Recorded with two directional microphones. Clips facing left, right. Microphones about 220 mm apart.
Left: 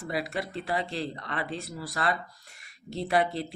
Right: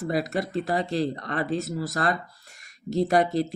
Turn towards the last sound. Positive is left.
turn(degrees=-40)  # may be behind; listen again after turning